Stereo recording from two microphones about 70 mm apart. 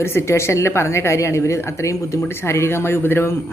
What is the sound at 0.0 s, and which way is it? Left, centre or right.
Speech, left.